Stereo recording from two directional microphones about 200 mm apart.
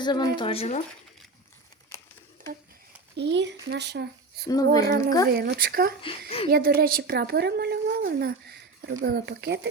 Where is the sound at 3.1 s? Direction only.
60° right (ahead or behind).